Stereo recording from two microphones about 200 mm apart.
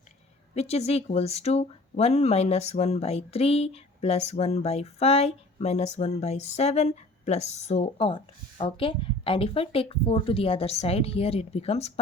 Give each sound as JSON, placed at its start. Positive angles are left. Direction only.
{"t": 0.5, "sound": "speech", "side_deg": 30}